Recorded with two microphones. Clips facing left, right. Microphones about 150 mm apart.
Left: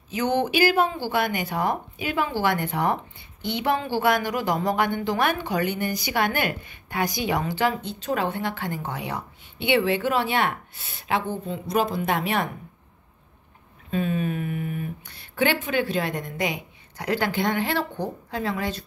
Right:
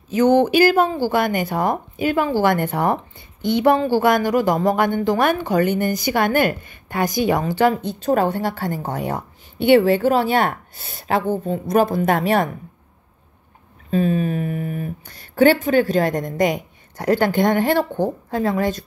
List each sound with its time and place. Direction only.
0.1 s speech: 45° right (ahead or behind)
13.8 s speech: 40° right (ahead or behind)